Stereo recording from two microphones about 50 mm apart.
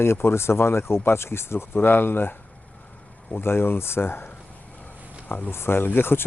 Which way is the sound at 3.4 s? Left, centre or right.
Left.